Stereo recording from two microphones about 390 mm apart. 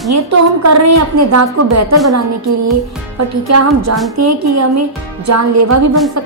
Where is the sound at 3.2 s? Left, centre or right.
Right.